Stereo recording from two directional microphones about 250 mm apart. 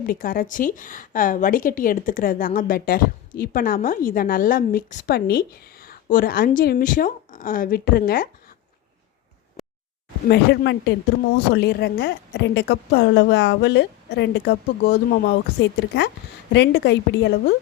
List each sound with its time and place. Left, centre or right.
0.0 s a woman's voice: left
10.2 s a woman's voice: left